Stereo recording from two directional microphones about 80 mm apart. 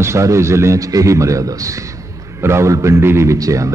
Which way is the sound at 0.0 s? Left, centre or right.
Right.